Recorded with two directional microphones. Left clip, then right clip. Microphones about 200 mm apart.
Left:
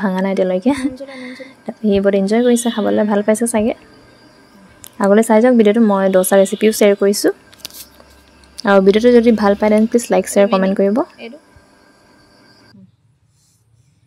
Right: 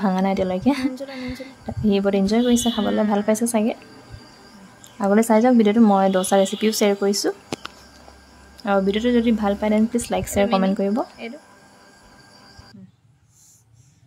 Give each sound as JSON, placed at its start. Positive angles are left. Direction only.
{"t": 0.0, "sound": "a woman's voice", "side_deg": 15}
{"t": 5.0, "sound": "speech", "side_deg": 25}
{"t": 5.3, "sound": "a woman's voice", "side_deg": 15}
{"t": 8.5, "sound": "speech", "side_deg": 35}
{"t": 9.9, "sound": "speech", "side_deg": 20}